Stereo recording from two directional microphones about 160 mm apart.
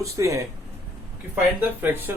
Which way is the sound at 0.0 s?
20° right (ahead or behind).